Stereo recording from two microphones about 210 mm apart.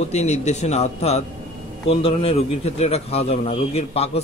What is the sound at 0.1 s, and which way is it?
A man's voice, 30° left (ahead or behind).